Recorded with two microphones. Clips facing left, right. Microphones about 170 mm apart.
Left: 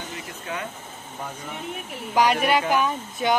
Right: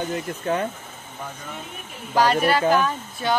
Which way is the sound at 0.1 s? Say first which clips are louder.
Right 9 dB; 45° right (ahead or behind).